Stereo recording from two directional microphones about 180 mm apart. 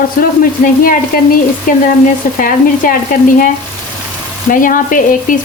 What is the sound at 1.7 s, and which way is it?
Speech, 50° left (ahead or behind).